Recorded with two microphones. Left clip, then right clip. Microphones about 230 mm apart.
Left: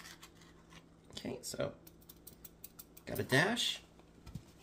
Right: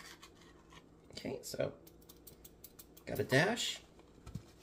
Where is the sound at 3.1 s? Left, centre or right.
Left.